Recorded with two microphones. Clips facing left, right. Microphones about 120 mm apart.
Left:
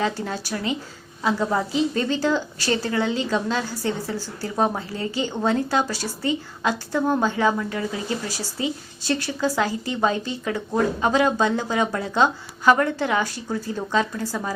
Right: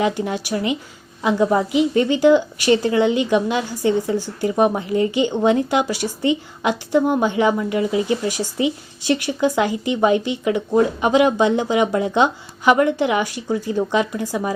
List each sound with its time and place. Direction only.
0.0 s a woman's voice: 15° right (ahead or behind)